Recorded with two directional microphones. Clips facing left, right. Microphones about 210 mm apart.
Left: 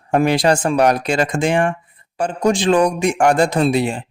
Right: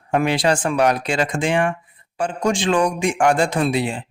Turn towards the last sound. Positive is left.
turn(degrees=45)  # may be behind; listen again after turning